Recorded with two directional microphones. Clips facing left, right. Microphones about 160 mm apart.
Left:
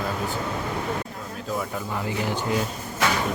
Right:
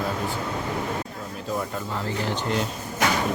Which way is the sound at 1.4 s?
Centre (ahead or behind).